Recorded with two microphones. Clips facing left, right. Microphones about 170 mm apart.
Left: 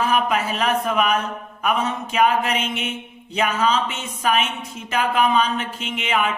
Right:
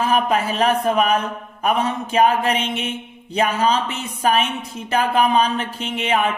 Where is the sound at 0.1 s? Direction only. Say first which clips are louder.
Right 2 dB; 30° right (ahead or behind).